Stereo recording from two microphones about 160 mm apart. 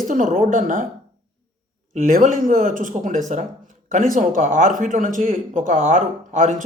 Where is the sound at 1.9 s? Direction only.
60° right (ahead or behind).